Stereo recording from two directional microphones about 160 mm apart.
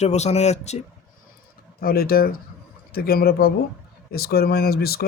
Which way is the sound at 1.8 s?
70° left (ahead or behind).